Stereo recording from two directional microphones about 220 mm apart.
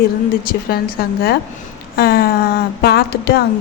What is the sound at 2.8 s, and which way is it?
Speech, 45° left (ahead or behind).